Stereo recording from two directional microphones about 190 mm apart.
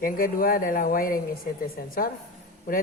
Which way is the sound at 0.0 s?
50° left (ahead or behind).